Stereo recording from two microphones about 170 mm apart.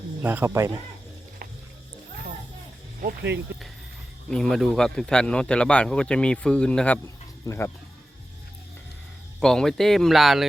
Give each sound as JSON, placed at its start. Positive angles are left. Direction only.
{"t": 0.2, "sound": "speech", "side_deg": -10}
{"t": 3.0, "sound": "speech", "side_deg": -60}
{"t": 4.3, "sound": "speech", "side_deg": 5}
{"t": 9.4, "sound": "speech", "side_deg": 5}